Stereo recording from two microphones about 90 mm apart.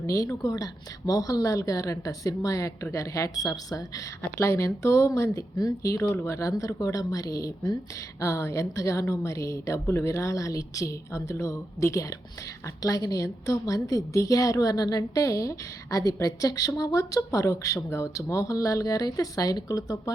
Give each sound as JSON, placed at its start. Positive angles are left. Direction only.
{"t": 0.0, "sound": "a woman's voice", "side_deg": 35}
{"t": 4.4, "sound": "a woman's voice", "side_deg": 30}